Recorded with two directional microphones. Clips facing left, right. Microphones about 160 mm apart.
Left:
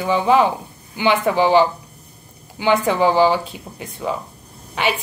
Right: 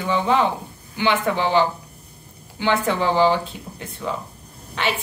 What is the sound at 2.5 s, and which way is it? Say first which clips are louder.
A woman's voice: left 4 dB; 15° left (ahead or behind).